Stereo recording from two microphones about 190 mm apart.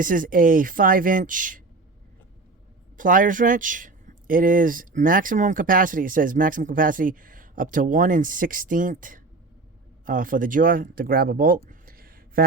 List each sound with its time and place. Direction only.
0.0 s speech: 45° right (ahead or behind)
3.0 s speech: 45° right (ahead or behind)
11.7 s a sound: 50° right (ahead or behind)